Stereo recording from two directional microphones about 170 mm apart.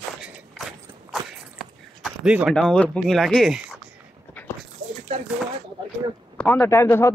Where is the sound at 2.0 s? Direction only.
5° right (ahead or behind).